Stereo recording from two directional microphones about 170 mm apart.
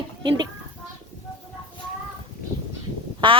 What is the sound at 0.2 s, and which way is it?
Speech, 25° right (ahead or behind).